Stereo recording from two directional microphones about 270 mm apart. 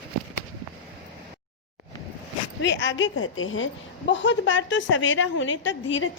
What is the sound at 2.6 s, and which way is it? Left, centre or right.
A woman's voice, left.